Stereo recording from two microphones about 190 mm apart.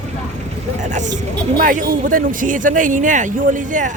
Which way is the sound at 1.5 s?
45° right (ahead or behind).